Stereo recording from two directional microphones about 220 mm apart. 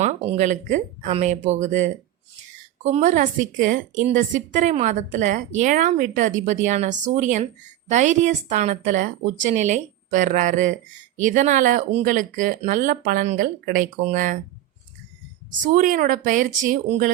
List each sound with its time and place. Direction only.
0.0 s a woman's voice: 30° right (ahead or behind)
15.4 s a woman's voice: 35° right (ahead or behind)